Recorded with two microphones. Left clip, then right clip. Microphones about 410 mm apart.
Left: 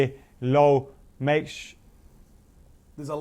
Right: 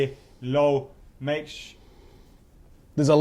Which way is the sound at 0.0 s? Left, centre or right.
Left.